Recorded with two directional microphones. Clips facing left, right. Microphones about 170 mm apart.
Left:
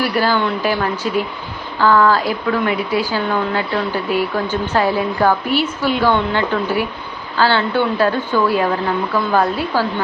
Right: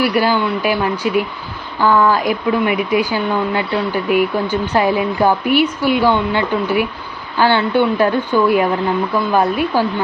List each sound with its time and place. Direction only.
0.0 s speech: 15° right (ahead or behind)